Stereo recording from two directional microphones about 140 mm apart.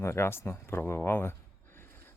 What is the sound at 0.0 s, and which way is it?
A man's voice, 20° left (ahead or behind).